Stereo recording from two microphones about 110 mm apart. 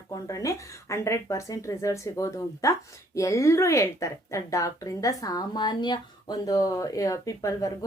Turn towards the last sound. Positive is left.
turn(degrees=30)  # may be behind; listen again after turning